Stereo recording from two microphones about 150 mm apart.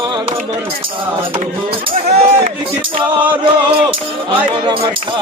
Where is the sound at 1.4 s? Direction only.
40° right (ahead or behind).